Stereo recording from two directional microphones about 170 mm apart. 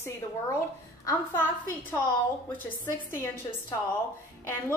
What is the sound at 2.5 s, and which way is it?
A woman's voice, 15° left (ahead or behind).